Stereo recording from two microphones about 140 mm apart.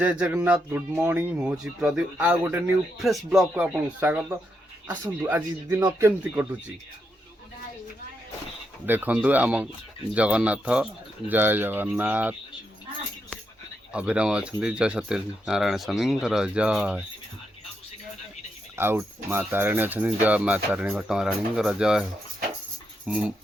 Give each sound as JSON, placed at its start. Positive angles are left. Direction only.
{"t": 0.0, "sound": "speech", "side_deg": -10}
{"t": 3.5, "sound": "speech", "side_deg": -10}
{"t": 8.9, "sound": "speech", "side_deg": -10}
{"t": 13.9, "sound": "speech", "side_deg": -10}
{"t": 18.8, "sound": "speech", "side_deg": -15}
{"t": 23.0, "sound": "speech", "side_deg": -5}